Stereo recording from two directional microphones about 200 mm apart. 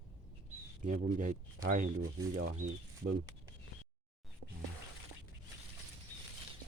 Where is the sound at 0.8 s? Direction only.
40° right (ahead or behind).